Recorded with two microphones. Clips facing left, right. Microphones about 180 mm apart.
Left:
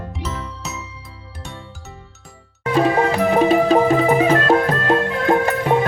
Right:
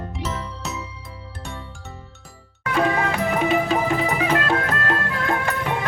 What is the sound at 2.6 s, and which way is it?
Music, 30° left (ahead or behind).